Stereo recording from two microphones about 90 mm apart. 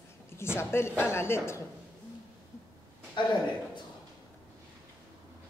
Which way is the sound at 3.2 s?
65° left (ahead or behind).